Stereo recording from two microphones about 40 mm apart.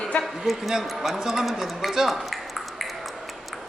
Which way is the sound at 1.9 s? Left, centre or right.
Centre.